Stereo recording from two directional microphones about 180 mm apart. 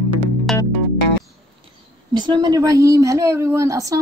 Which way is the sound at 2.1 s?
25° right (ahead or behind).